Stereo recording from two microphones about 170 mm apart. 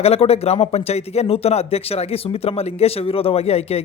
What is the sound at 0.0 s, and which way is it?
Speech, 35° left (ahead or behind).